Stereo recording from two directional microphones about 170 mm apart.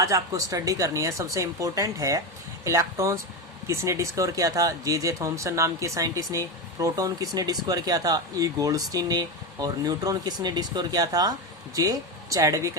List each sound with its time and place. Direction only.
0.0 s speech: 20° right (ahead or behind)